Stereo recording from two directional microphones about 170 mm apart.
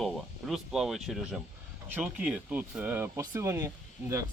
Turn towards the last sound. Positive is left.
turn(degrees=-15)  # may be behind; listen again after turning